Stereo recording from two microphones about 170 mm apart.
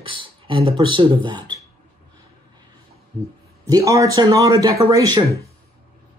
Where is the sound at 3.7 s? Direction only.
20° right (ahead or behind).